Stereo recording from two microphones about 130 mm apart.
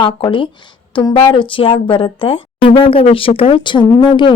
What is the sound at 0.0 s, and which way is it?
Speech, 40° left (ahead or behind).